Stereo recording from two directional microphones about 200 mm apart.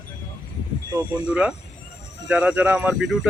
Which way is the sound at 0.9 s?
5° right (ahead or behind).